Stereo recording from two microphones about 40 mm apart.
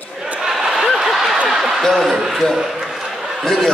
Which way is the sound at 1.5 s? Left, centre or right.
Centre.